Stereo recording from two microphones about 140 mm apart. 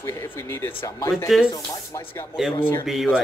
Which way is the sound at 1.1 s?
Centre (ahead or behind).